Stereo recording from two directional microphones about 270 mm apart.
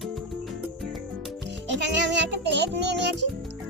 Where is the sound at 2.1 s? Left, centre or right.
Right.